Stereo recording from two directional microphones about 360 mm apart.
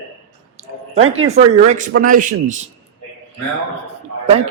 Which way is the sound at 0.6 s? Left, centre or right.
Centre.